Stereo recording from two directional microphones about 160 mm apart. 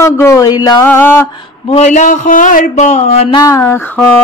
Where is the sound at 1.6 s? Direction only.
40° left (ahead or behind).